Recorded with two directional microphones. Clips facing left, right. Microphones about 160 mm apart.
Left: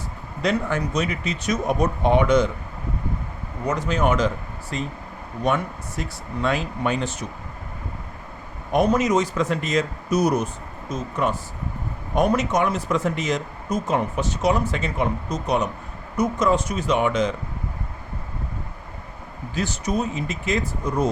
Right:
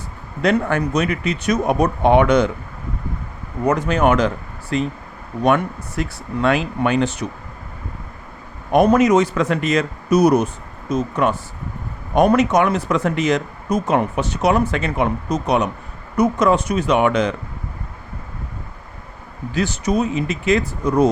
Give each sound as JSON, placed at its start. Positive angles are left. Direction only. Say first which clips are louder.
{"t": 0.4, "sound": "speech", "louder": "right 5 dB", "side_deg": -60}
{"t": 3.7, "sound": "speech", "louder": "right 5 dB", "side_deg": -60}
{"t": 4.7, "sound": "speech", "louder": "right 8 dB", "side_deg": -75}
{"t": 8.7, "sound": "speech", "louder": "right 6 dB", "side_deg": -65}
{"t": 19.5, "sound": "speech", "louder": "right 5 dB", "side_deg": -75}